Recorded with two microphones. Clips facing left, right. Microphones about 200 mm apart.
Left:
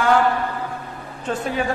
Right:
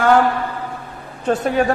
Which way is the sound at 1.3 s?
40° right (ahead or behind).